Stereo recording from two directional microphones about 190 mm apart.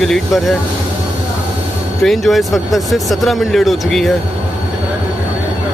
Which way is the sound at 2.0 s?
Centre (ahead or behind).